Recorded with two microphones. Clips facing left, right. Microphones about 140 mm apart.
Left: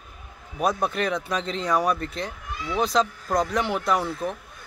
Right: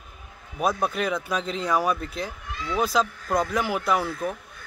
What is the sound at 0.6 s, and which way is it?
A man's voice, centre (ahead or behind).